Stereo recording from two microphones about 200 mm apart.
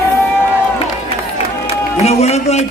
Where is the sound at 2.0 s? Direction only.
35° left (ahead or behind).